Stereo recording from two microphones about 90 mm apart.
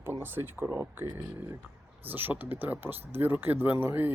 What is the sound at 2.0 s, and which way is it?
Speech, 20° right (ahead or behind).